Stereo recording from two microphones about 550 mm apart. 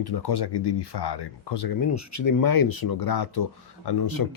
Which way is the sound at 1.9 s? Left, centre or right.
Left.